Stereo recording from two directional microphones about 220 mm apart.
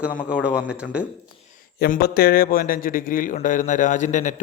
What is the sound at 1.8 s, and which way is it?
A man's voice, 45° left (ahead or behind).